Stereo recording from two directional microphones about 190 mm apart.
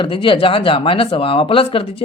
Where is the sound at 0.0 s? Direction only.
25° left (ahead or behind).